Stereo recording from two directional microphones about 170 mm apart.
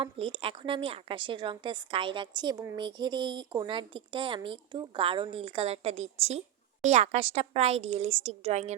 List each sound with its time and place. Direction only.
0.0 s a woman's voice: 30° right (ahead or behind)